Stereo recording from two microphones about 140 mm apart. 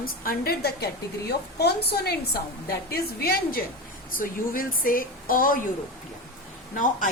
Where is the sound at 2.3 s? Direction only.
90° left.